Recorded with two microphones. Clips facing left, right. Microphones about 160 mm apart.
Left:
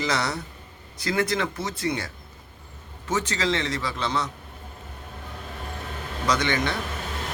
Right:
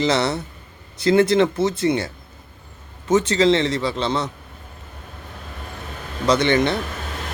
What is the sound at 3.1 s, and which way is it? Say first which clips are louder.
Speech: right 9 dB; 25° right (ahead or behind).